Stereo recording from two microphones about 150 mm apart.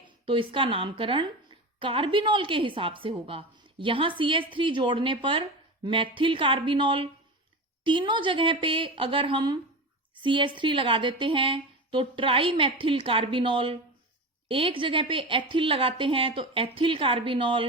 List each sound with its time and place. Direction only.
0.3 s a woman's voice: 35° right (ahead or behind)